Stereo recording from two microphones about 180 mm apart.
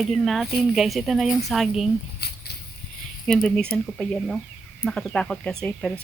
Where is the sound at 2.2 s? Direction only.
65° left (ahead or behind).